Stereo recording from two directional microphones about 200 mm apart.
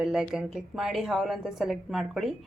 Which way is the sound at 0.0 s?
Centre (ahead or behind).